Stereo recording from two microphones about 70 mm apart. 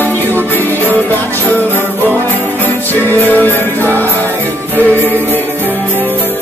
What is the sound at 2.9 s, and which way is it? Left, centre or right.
Music, left.